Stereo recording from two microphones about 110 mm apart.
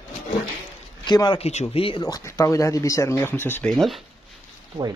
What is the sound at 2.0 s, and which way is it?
Speech, 30° left (ahead or behind).